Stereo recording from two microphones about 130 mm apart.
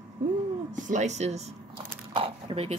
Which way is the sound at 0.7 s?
70° right (ahead or behind).